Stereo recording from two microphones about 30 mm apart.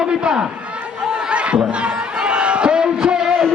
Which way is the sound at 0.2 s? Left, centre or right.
Right.